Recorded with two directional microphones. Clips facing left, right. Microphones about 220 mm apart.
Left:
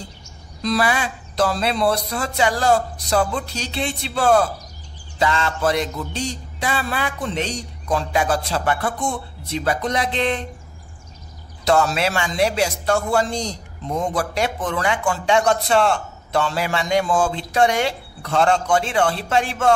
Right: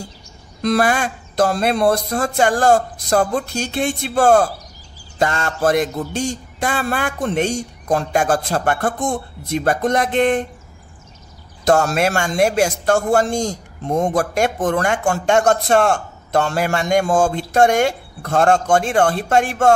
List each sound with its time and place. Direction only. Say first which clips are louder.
0.6 s speech: right 4 dB; 50° right (ahead or behind)
11.6 s speech: right 3 dB; 45° right (ahead or behind)